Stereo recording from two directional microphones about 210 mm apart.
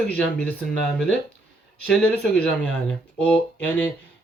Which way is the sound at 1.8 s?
5° left (ahead or behind).